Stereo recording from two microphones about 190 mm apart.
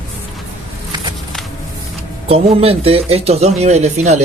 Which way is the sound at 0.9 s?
20° right (ahead or behind).